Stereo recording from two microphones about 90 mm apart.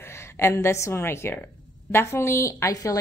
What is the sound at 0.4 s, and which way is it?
A woman's voice, 30° left (ahead or behind).